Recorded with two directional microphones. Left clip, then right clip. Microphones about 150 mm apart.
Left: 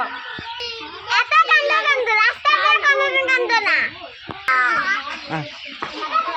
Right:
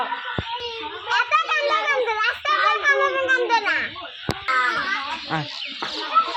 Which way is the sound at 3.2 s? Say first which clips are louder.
Left 2 dB; 25° right (ahead or behind).